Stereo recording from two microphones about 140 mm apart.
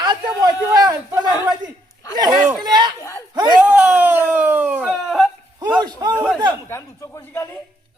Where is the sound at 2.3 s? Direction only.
5° right (ahead or behind).